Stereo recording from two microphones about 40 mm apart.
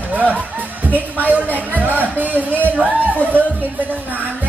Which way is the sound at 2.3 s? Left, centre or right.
Left.